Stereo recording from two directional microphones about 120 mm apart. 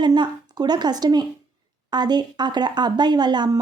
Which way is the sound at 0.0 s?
35° right (ahead or behind).